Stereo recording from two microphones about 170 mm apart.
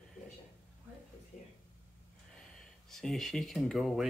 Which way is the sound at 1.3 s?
45° left (ahead or behind).